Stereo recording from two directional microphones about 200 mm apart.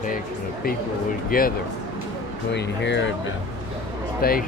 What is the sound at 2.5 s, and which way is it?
Speech, 60° left (ahead or behind).